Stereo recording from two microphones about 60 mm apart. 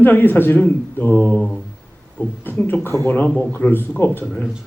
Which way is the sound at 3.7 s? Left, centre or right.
Left.